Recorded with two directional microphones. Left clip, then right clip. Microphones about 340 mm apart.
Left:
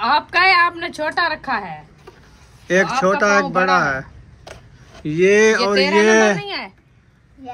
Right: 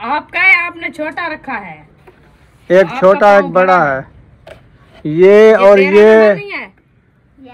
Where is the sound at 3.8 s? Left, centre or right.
Centre.